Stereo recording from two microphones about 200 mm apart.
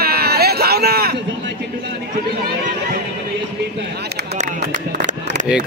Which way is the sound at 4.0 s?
55° right (ahead or behind).